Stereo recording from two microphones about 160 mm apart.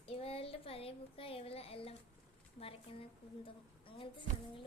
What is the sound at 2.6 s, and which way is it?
A woman's voice, 35° left (ahead or behind).